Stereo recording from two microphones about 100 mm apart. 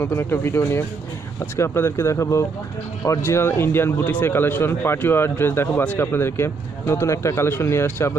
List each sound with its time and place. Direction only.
0.0 s speech: 25° left (ahead or behind)